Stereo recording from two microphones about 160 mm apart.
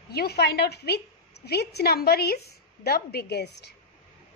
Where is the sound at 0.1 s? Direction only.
85° left.